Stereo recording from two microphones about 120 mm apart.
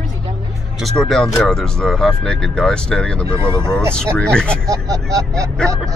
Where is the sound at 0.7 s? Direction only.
5° left (ahead or behind).